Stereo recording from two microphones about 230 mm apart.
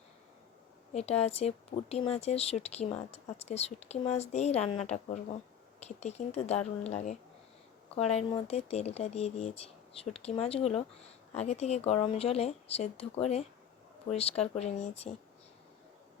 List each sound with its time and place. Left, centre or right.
0.9 s speech: left